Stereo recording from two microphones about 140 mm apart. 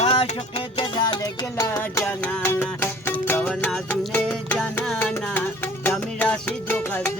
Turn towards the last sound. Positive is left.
turn(degrees=15)  # may be behind; listen again after turning